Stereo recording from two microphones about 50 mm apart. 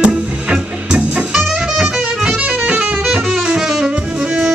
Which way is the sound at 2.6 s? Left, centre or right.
Right.